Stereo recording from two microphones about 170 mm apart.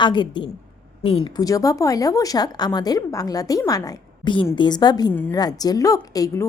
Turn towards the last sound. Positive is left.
turn(degrees=20)  # may be behind; listen again after turning